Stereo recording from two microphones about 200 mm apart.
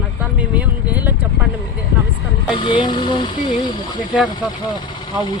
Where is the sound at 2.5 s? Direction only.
25° left (ahead or behind).